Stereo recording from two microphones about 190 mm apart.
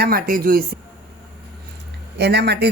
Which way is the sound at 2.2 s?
60° right (ahead or behind).